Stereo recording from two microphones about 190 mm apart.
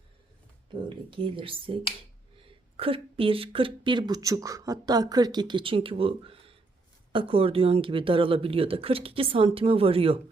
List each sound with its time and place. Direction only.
0.9 s speech: 25° right (ahead or behind)